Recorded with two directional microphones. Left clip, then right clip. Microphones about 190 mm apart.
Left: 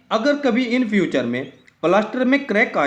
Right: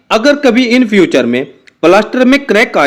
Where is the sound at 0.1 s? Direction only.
40° right (ahead or behind).